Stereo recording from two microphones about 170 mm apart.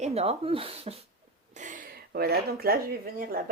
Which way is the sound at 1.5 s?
50° right (ahead or behind).